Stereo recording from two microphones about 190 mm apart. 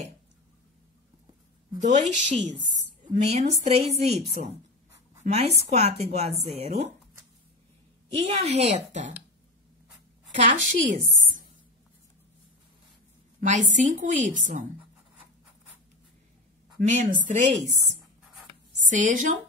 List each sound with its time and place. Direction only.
1.8 s a woman's voice: 40° right (ahead or behind)
8.3 s a woman's voice: 35° right (ahead or behind)
10.3 s a woman's voice: 40° right (ahead or behind)
13.4 s a woman's voice: 40° right (ahead or behind)
16.7 s a woman's voice: 40° right (ahead or behind)
18.9 s a woman's voice: 45° right (ahead or behind)